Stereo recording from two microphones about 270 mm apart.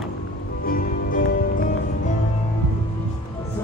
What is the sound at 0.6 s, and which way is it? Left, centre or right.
Music, left.